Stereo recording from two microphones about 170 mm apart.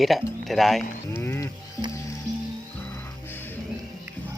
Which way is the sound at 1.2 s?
15° left (ahead or behind).